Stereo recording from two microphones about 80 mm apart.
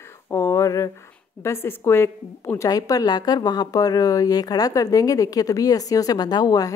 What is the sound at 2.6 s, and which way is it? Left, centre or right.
A woman's voice, left.